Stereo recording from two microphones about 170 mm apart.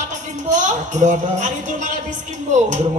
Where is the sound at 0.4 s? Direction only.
45° right (ahead or behind).